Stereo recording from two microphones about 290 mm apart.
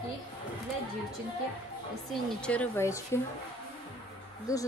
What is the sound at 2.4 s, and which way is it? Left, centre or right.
Speech, centre.